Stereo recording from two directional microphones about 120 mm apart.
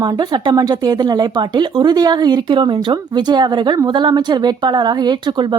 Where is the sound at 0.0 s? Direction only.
35° right (ahead or behind).